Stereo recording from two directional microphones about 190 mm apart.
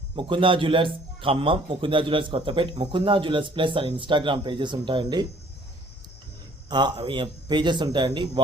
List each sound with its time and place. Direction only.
0.2 s a man's voice: 25° right (ahead or behind)
6.7 s a man's voice: 20° right (ahead or behind)